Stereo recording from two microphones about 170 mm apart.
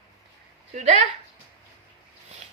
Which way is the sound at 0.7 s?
40° right (ahead or behind).